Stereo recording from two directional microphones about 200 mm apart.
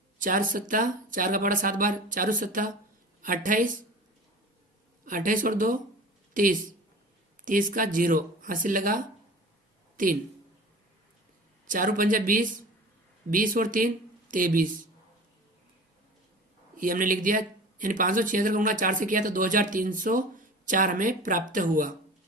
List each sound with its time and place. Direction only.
0.2 s a woman's voice: 45° right (ahead or behind)
5.0 s speech: 40° right (ahead or behind)
11.6 s speech: 40° right (ahead or behind)
16.7 s speech: 45° right (ahead or behind)